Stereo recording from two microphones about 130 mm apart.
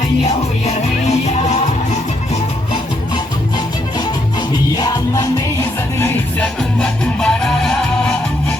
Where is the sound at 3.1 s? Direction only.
35° left (ahead or behind).